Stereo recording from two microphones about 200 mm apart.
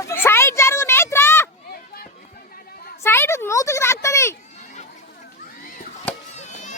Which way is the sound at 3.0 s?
10° left (ahead or behind).